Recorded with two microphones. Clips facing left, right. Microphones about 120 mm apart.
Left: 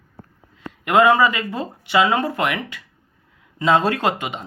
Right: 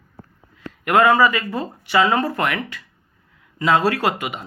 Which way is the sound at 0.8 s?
20° left (ahead or behind).